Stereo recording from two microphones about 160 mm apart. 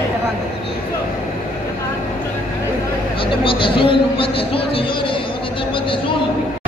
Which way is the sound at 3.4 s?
35° left (ahead or behind).